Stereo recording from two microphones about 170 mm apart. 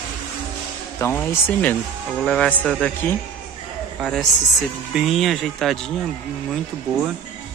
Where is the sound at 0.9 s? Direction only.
15° left (ahead or behind).